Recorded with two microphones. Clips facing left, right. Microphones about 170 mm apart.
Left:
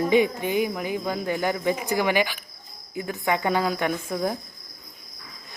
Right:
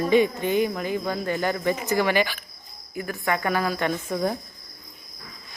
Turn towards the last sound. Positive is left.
turn(degrees=5)  # may be behind; listen again after turning